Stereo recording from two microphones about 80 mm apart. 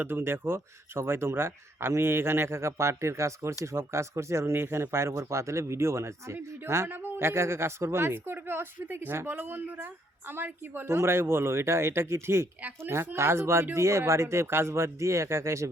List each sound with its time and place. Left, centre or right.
0.0 s a woman's voice: right